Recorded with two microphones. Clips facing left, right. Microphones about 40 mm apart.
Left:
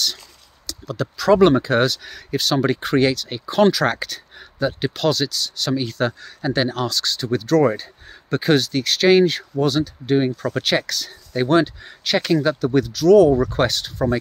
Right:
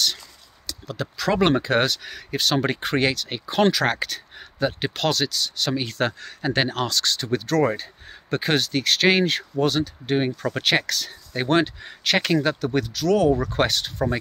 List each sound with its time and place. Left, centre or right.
0.7 s speech: right
5.9 s speech: right
7.3 s speech: right
12.7 s speech: right